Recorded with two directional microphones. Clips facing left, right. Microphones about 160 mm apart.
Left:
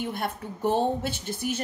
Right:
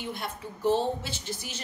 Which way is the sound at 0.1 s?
55° left (ahead or behind).